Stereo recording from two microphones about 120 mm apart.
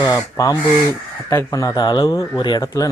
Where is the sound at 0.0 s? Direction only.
30° left (ahead or behind).